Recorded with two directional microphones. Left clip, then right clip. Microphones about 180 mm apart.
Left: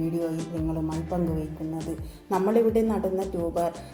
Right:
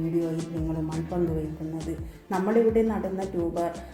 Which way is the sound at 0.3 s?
Centre (ahead or behind).